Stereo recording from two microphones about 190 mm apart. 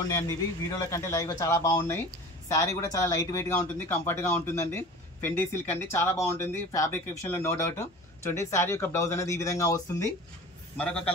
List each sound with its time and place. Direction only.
0.1 s speech: 20° left (ahead or behind)
10.8 s speech: 5° left (ahead or behind)